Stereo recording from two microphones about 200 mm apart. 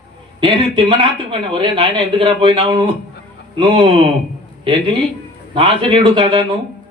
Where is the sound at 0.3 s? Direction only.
25° right (ahead or behind).